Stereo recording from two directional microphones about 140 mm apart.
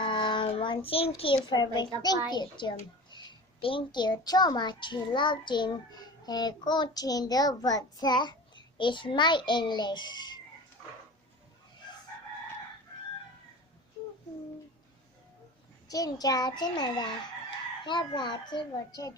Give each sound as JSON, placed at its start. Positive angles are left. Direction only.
{"t": 0.0, "sound": "child singing", "side_deg": 35}
{"t": 1.5, "sound": "a child's voice", "side_deg": 30}
{"t": 15.9, "sound": "a child's voice", "side_deg": 25}